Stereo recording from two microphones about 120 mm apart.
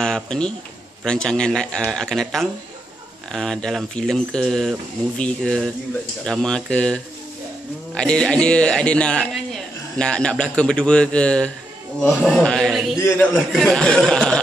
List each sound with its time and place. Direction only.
0.0 s a sound: 5° left (ahead or behind)
1.0 s speech: 5° left (ahead or behind)
13.0 s a man's voice: 20° left (ahead or behind)
13.5 s speech: centre (ahead or behind)